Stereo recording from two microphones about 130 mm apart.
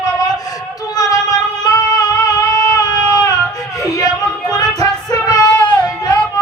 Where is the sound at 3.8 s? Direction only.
25° left (ahead or behind).